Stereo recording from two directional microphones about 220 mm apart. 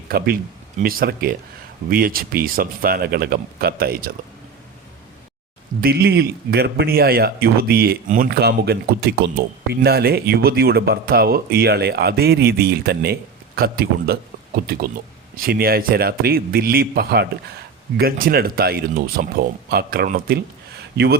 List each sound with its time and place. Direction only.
0.8 s speech: 40° right (ahead or behind)
5.8 s a man's voice: 45° right (ahead or behind)